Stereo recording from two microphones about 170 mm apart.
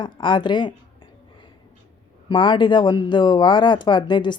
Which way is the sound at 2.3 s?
30° left (ahead or behind).